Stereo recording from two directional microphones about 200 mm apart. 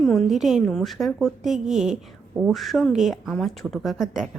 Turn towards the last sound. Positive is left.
turn(degrees=0)  # may be behind; listen again after turning